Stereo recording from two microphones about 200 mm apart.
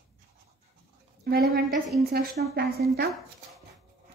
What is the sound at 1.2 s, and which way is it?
A woman's voice, 50° right (ahead or behind).